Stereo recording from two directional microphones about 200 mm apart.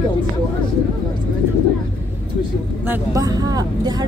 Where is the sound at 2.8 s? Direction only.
15° right (ahead or behind).